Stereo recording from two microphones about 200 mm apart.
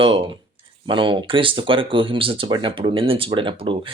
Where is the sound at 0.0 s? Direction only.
25° right (ahead or behind).